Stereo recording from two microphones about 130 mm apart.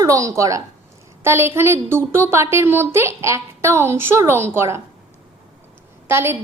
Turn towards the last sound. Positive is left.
turn(degrees=-20)  # may be behind; listen again after turning